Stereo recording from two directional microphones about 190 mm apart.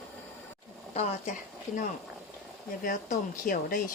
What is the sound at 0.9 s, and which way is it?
Speech, 35° left (ahead or behind).